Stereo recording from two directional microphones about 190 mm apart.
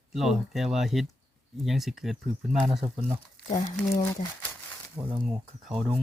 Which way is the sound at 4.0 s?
15° left (ahead or behind).